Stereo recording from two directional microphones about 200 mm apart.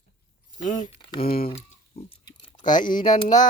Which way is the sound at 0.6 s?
40° left (ahead or behind).